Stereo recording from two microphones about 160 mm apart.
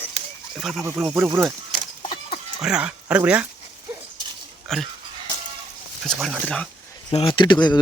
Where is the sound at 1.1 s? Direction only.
15° right (ahead or behind).